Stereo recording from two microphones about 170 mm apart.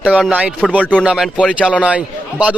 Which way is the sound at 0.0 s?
5° right (ahead or behind).